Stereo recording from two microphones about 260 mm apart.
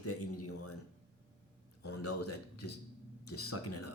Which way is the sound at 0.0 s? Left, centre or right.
Left.